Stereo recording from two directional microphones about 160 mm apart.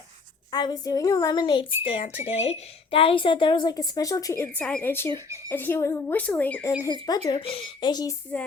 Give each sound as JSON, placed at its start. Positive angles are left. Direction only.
{"t": 0.5, "sound": "a woman's voice", "side_deg": 25}
{"t": 7.3, "sound": "speech", "side_deg": 35}
{"t": 8.3, "sound": "a woman's voice", "side_deg": 10}